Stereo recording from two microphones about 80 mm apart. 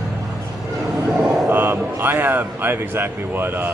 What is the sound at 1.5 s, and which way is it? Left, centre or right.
Speech, right.